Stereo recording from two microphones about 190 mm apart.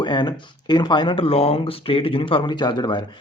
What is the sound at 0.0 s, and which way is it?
Speech, 25° left (ahead or behind).